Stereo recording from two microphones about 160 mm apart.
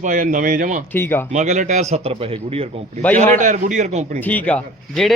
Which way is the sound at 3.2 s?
50° right (ahead or behind).